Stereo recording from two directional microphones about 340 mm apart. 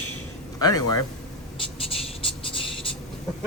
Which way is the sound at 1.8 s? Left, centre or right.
Centre.